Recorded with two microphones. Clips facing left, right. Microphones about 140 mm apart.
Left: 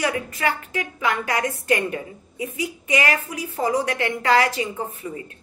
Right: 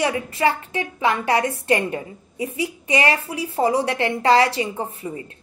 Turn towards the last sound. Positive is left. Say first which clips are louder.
# right 1 dB
turn(degrees=-30)  # may be behind; listen again after turning